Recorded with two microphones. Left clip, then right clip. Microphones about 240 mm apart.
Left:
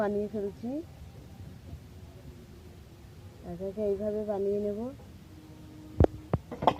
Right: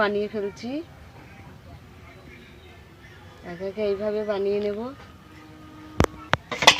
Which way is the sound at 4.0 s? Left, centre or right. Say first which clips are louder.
Right 6 dB; right.